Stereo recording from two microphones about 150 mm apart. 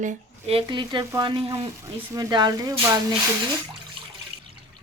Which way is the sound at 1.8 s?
20° right (ahead or behind).